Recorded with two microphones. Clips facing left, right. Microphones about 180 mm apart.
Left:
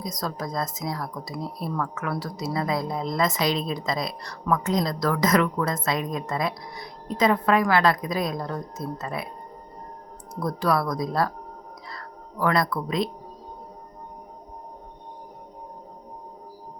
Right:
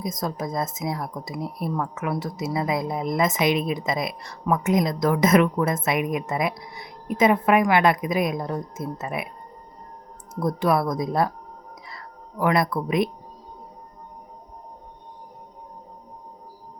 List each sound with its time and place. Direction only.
0.0 s speech: 20° right (ahead or behind)
10.4 s speech: 20° right (ahead or behind)
12.4 s speech: 20° right (ahead or behind)